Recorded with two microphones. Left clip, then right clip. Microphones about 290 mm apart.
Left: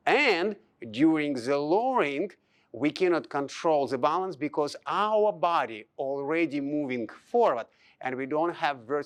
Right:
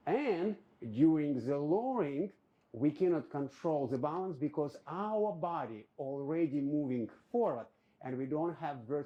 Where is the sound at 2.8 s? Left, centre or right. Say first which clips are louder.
Left 6 dB; centre.